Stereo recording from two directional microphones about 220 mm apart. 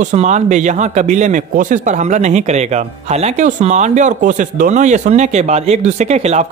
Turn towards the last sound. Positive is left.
turn(degrees=-30)  # may be behind; listen again after turning